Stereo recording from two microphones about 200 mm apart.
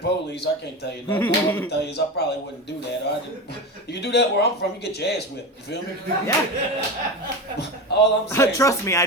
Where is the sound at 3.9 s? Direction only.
55° left (ahead or behind).